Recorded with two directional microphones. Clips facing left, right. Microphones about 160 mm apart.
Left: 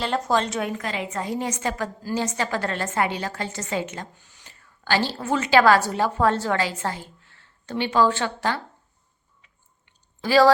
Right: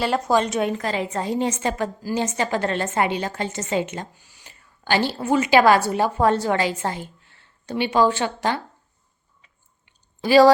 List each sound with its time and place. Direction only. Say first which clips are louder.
0.0 s a woman's voice: right 3 dB; 10° right (ahead or behind)
4.2 s a woman's voice: right 1 dB; 10° right (ahead or behind)
9.8 s chewing: right 3 dB; 15° right (ahead or behind)